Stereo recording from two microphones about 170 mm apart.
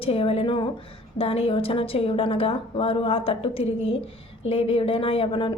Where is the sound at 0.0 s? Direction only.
35° left (ahead or behind).